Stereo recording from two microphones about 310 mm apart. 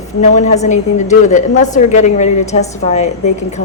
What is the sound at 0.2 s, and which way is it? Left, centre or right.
A woman's voice, left.